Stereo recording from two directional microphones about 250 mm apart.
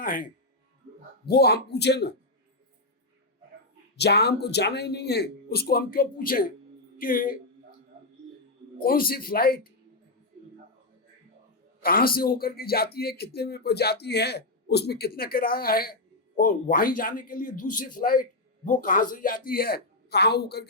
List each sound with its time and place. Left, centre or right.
0.0 s speech: left
1.3 s speech: left
3.9 s speech: left
8.8 s speech: left
11.8 s speech: left